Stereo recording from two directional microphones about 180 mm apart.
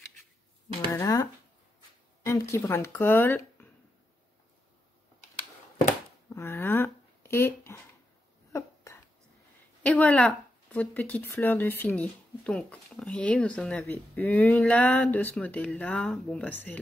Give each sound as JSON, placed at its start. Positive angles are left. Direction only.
{"t": 0.8, "sound": "speech", "side_deg": 15}
{"t": 6.3, "sound": "a sound", "side_deg": 15}
{"t": 9.8, "sound": "speech", "side_deg": 10}